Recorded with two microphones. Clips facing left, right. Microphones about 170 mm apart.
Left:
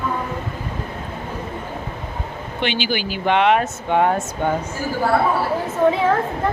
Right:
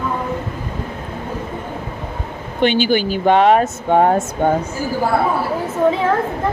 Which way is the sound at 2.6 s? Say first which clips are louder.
Right 8 dB; 45° right (ahead or behind).